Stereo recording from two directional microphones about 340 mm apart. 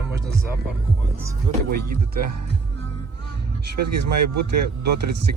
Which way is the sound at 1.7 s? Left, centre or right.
Right.